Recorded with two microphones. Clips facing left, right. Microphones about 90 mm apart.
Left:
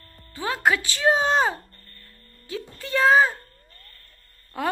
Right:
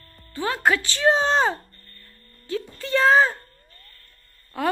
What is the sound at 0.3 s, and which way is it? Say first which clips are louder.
A woman's voice: right 1 dB; 15° left (ahead or behind).